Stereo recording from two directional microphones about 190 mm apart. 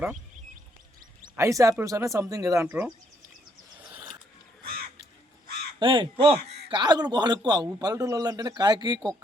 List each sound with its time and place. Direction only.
1.4 s speech: 15° right (ahead or behind)
5.8 s a man's voice: 25° right (ahead or behind)